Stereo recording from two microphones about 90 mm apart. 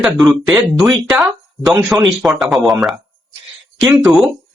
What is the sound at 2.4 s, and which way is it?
Speech, centre (ahead or behind).